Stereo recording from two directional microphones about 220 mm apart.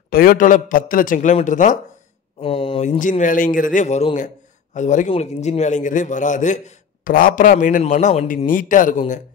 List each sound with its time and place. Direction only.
0.1 s a man's voice: 40° left (ahead or behind)
2.4 s a man's voice: 25° left (ahead or behind)